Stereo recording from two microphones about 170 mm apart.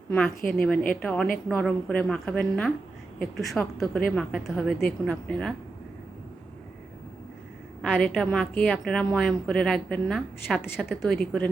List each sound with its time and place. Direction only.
0.5 s a woman's voice: 5° left (ahead or behind)
7.8 s a woman's voice: centre (ahead or behind)